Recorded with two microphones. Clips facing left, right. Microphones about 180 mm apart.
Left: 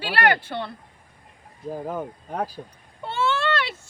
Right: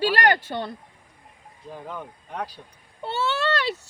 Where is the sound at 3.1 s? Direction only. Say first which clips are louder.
Left 2 dB; 40° right (ahead or behind).